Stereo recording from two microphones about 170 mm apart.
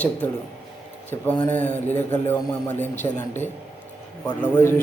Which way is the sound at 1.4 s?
10° left (ahead or behind).